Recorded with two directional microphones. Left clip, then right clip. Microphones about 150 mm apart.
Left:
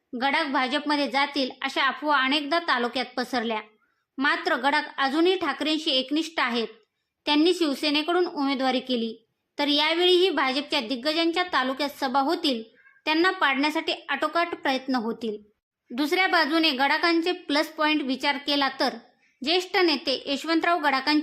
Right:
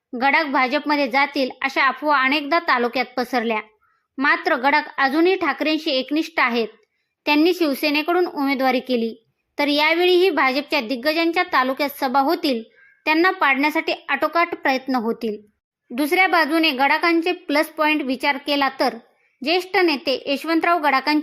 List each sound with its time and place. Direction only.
0.2 s a woman's voice: 20° right (ahead or behind)